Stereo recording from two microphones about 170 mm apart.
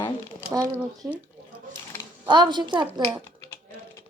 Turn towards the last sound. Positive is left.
turn(degrees=-25)  # may be behind; listen again after turning